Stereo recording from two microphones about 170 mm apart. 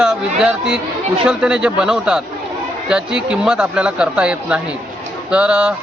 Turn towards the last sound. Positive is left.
turn(degrees=-5)  # may be behind; listen again after turning